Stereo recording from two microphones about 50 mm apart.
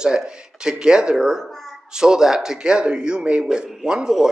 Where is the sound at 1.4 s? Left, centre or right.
Centre.